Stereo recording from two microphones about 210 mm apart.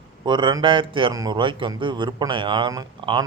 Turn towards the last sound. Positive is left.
turn(degrees=-20)  # may be behind; listen again after turning